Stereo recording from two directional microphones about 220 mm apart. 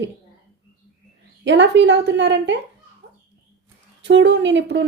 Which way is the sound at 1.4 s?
55° right (ahead or behind).